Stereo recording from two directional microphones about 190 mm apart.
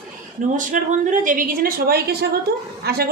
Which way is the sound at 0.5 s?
40° right (ahead or behind).